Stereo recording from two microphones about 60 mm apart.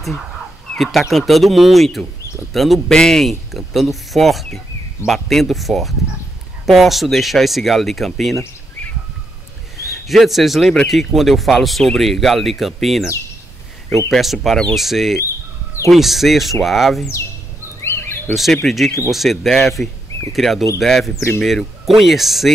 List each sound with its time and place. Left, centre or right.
0.7 s bird: centre
1.1 s speech: centre
9.8 s a man's voice: centre
14.1 s speech: centre
17.8 s bird: left
18.3 s speech: centre